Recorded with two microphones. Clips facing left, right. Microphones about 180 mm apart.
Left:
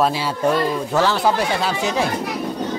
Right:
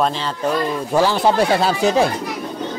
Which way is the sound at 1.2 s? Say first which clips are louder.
Right 4 dB; 30° right (ahead or behind).